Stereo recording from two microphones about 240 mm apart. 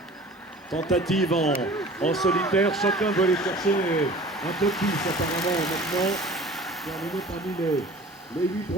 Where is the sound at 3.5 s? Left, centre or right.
Centre.